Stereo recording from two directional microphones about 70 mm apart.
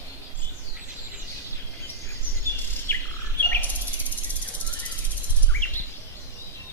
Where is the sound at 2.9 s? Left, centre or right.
Left.